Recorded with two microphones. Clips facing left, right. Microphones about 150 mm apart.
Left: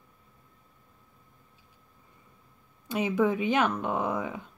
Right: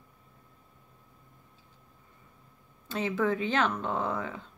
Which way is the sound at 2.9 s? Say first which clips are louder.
Left 3 dB; 15° left (ahead or behind).